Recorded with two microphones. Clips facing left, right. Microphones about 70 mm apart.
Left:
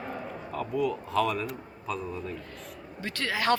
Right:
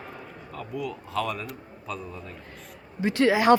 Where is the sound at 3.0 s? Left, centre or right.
Centre.